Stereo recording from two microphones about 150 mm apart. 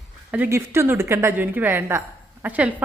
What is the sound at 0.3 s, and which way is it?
A woman's voice, 10° right (ahead or behind).